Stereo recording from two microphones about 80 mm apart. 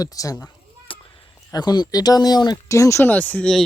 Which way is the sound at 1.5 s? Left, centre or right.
Left.